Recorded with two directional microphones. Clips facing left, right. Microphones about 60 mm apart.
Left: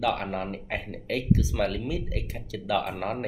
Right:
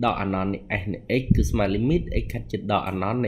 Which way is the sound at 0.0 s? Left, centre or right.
Right.